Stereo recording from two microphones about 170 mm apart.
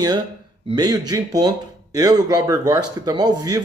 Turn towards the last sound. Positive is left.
turn(degrees=-20)  # may be behind; listen again after turning